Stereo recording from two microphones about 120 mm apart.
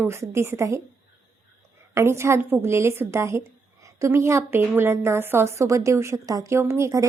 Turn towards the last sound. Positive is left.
turn(degrees=-25)  # may be behind; listen again after turning